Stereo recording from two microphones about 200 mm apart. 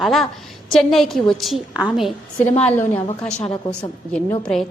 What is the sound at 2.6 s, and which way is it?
Speech, 10° left (ahead or behind).